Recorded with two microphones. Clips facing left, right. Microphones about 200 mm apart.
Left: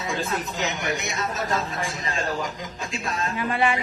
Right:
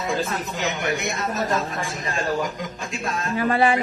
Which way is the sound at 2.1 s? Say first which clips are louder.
Right 5 dB; 55° right (ahead or behind).